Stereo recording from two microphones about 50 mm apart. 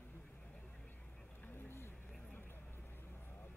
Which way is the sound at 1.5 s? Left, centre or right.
Left.